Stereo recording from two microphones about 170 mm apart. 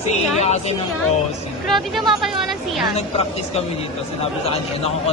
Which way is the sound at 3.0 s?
40° left (ahead or behind).